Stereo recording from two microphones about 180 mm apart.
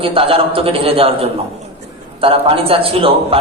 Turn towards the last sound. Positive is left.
turn(degrees=-30)  # may be behind; listen again after turning